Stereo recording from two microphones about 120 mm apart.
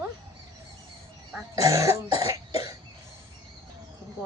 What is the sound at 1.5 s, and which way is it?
Cough, 25° right (ahead or behind).